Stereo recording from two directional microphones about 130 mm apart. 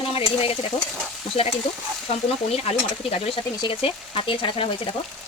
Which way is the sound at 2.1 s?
50° left (ahead or behind).